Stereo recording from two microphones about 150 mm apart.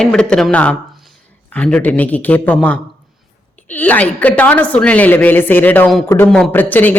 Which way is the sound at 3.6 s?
10° left (ahead or behind).